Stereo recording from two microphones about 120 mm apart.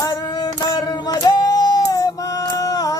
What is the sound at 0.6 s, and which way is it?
Child singing, 30° left (ahead or behind).